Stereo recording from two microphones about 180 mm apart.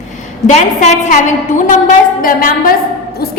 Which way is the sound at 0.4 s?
40° left (ahead or behind).